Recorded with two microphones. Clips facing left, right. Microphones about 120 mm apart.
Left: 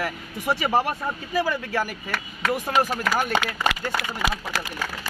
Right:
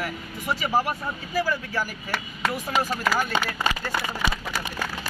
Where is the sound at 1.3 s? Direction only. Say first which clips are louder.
Left 1 dB; 60° left (ahead or behind).